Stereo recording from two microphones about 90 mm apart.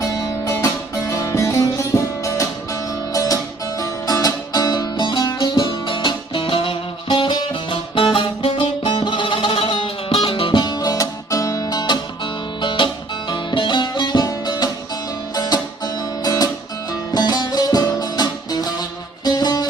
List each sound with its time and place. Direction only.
0.2 s music: 40° left (ahead or behind)